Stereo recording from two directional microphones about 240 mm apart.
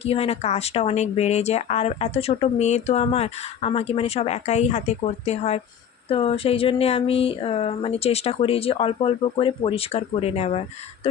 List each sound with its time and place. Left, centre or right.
0.0 s speech: left